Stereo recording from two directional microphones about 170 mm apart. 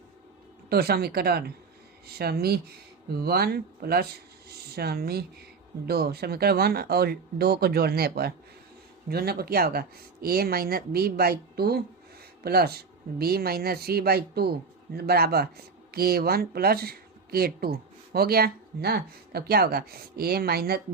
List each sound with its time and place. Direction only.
0.7 s speech: 65° right (ahead or behind)
4.4 s a sound: 70° right (ahead or behind)
5.8 s speech: 65° right (ahead or behind)